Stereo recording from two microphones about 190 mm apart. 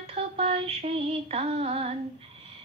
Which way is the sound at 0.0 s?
30° right (ahead or behind).